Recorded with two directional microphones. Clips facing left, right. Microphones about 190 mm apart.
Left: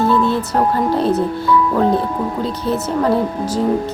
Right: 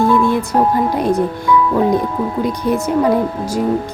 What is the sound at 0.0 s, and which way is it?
Speech, 15° right (ahead or behind).